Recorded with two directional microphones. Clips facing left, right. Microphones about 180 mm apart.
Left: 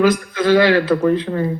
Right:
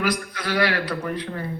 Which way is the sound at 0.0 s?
25° left (ahead or behind).